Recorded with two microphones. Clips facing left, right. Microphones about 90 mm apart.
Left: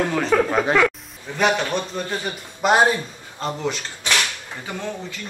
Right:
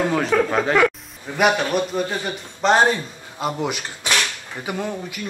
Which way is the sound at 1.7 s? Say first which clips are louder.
Right 4 dB; 10° right (ahead or behind).